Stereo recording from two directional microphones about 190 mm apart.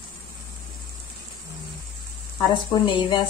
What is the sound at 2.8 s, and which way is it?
Speech, 25° left (ahead or behind).